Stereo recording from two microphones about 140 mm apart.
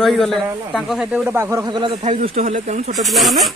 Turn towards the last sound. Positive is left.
turn(degrees=0)  # may be behind; listen again after turning